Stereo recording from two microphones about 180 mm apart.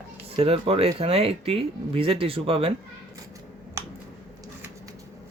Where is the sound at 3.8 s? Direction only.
15° right (ahead or behind).